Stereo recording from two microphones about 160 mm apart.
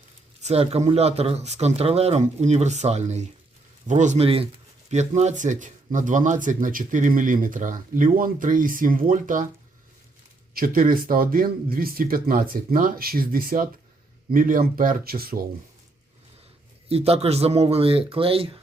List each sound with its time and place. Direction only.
0.4 s speech: 40° right (ahead or behind); by 9.5 s 55° right (ahead or behind)
10.5 s speech: 65° right (ahead or behind)
16.9 s speech: 40° right (ahead or behind)